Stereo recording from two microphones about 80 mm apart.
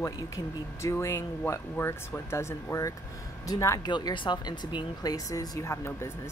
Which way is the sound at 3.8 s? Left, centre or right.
Left.